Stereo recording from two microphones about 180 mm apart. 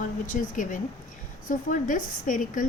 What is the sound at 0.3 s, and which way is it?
A woman's voice, 45° left (ahead or behind).